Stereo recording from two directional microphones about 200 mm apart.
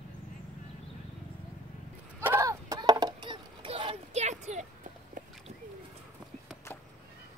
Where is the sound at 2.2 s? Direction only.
15° right (ahead or behind); by 4.9 s 35° right (ahead or behind).